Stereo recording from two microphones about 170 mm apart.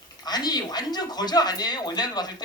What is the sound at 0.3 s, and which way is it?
Speech, 25° left (ahead or behind).